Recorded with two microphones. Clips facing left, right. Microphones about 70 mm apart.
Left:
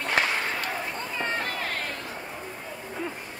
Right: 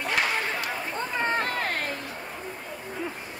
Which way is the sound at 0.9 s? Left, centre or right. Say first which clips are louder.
Right 3 dB; right.